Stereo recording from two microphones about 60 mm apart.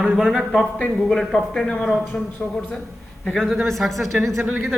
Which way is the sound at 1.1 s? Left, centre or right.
Centre.